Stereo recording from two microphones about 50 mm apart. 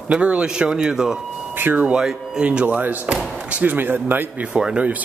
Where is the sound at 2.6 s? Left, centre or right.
Right.